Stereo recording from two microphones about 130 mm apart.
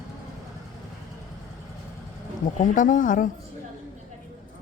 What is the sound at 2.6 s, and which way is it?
Speech, 90° left.